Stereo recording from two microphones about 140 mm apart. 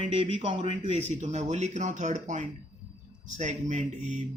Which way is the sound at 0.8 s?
55° right (ahead or behind).